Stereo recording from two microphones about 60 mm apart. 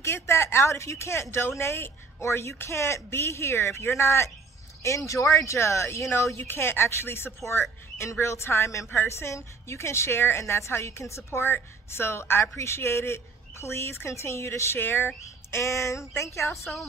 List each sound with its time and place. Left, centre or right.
0.0 s speech: left
4.8 s speech: left
6.3 s speech: left
14.8 s speech: left
15.6 s speech: left